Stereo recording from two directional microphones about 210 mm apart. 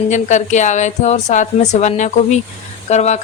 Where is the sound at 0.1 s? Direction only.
35° left (ahead or behind).